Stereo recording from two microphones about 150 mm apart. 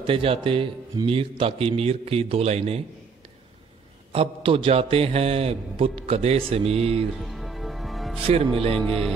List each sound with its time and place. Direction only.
0.0 s a man's voice: 40° right (ahead or behind)
4.1 s a man's voice: 40° right (ahead or behind)
7.2 s music: centre (ahead or behind)
8.2 s a man's voice: 40° right (ahead or behind)
8.7 s music: 5° left (ahead or behind)